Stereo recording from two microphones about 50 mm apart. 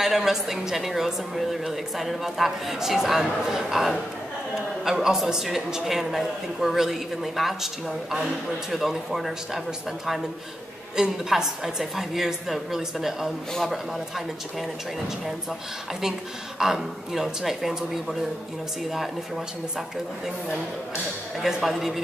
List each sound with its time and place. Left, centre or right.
0.0 s a man's voice: centre
11.0 s a woman's voice: centre
16.0 s a woman's voice: centre
21.4 s a man's voice: centre